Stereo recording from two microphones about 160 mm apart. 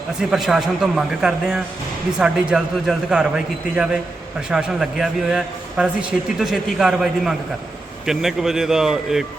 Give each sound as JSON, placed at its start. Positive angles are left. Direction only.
{"t": 0.2, "sound": "a man's voice", "side_deg": 0}